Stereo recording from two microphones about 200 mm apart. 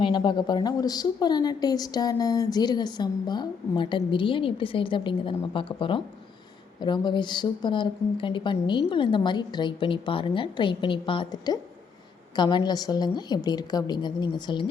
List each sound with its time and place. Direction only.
0.0 s speech: 20° left (ahead or behind)